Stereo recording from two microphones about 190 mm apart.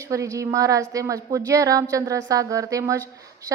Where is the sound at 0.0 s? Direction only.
15° right (ahead or behind).